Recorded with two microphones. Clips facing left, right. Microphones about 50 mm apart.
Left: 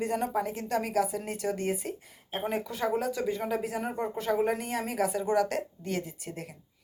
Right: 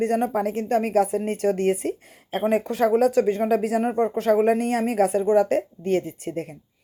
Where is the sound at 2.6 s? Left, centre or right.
Right.